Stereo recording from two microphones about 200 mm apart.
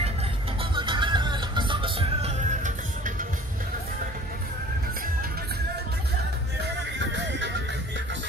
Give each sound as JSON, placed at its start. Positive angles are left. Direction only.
{"t": 0.6, "sound": "music", "side_deg": -25}